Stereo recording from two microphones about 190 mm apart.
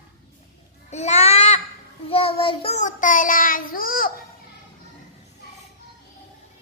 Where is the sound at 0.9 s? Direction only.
35° left (ahead or behind).